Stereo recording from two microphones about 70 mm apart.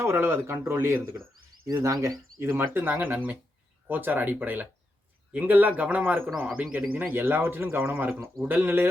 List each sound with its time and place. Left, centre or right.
0.0 s speech: right
1.8 s speech: right
2.6 s a man's voice: right